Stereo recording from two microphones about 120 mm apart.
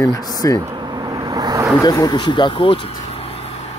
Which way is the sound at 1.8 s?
30° left (ahead or behind).